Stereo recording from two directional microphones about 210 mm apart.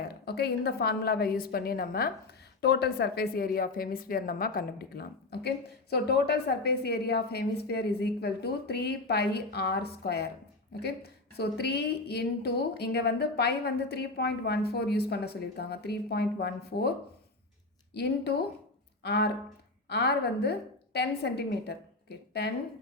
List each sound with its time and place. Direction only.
0.1 s a woman's voice: 50° left (ahead or behind)
17.9 s a woman's voice: 50° left (ahead or behind)